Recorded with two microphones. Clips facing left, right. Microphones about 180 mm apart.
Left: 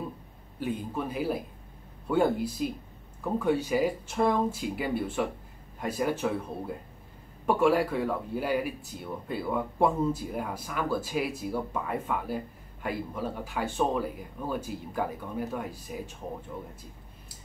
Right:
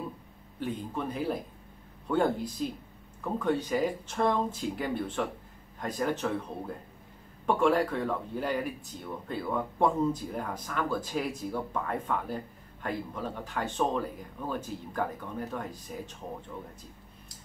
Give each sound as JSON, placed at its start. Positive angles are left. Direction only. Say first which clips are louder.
{"t": 0.6, "sound": "speech", "louder": "left 2 dB", "side_deg": 5}